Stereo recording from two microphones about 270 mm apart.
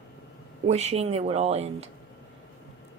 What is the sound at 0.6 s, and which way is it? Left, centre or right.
A woman's voice, right.